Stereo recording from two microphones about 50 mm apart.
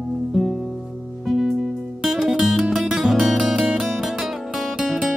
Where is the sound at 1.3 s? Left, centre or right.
Centre.